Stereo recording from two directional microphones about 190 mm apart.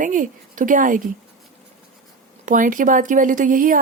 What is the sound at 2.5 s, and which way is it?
Speech, 45° right (ahead or behind).